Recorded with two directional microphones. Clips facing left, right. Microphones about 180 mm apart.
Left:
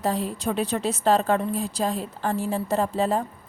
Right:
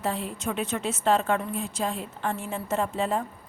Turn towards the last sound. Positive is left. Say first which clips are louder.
# left 3 dB
turn(degrees=35)  # may be behind; listen again after turning